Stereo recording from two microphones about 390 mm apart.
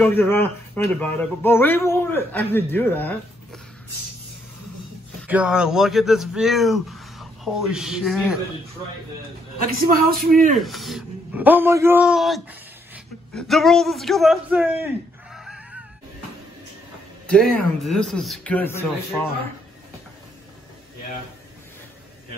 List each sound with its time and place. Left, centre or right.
0.0 s a man's voice: centre
5.3 s a man's voice: centre
9.6 s a man's voice: right
10.6 s a man's voice: centre
15.3 s a sound: centre
17.3 s a man's voice: centre